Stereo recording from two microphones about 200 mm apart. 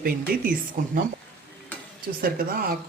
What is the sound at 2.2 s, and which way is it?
Speech, 50° right (ahead or behind).